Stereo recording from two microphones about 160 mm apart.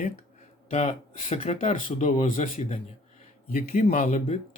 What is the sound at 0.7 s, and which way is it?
Speech, 45° left (ahead or behind).